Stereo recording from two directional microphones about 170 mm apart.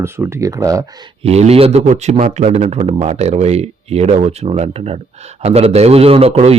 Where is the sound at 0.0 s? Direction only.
15° right (ahead or behind).